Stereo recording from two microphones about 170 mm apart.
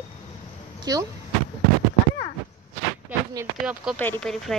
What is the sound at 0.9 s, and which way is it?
Speech, 20° right (ahead or behind).